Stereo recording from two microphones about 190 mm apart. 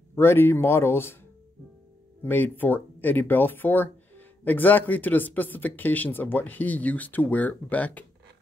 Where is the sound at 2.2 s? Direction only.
10° left (ahead or behind).